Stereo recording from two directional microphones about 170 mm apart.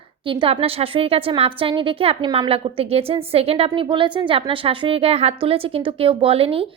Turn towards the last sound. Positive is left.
turn(degrees=-35)  # may be behind; listen again after turning